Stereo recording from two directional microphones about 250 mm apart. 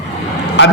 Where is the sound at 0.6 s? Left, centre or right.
Left.